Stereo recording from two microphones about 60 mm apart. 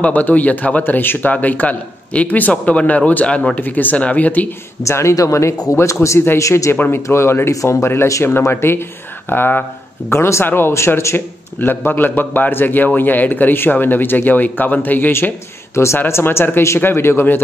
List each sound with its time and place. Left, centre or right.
0.0 s speech: left
4.8 s speech: left
6.0 s speech: left
6.4 s speech: left
6.7 s a man's voice: left
8.5 s a man's voice: left
10.1 s speech: left
11.6 s a man's voice: left